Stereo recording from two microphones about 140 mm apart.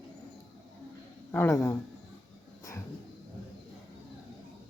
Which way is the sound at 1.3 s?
15° left (ahead or behind).